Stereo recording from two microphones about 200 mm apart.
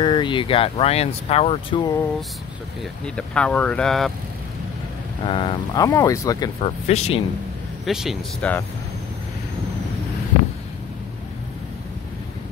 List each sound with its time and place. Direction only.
0.0 s speech: 25° left (ahead or behind)
2.8 s speech: 5° left (ahead or behind)
5.2 s speech: 25° left (ahead or behind)
6.6 s speech: 30° left (ahead or behind)
7.8 s speech: centre (ahead or behind)